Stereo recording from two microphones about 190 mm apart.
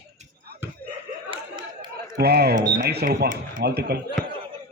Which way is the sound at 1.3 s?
25° right (ahead or behind).